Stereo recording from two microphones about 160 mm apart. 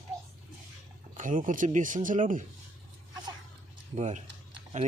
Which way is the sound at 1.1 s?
55° right (ahead or behind).